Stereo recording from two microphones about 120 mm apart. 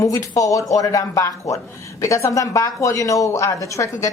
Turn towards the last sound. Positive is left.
turn(degrees=25)  # may be behind; listen again after turning